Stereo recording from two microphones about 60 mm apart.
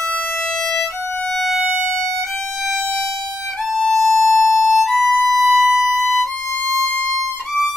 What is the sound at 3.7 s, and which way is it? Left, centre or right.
Music, centre.